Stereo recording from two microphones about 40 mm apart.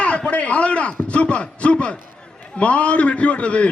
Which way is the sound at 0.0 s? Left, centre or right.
Left.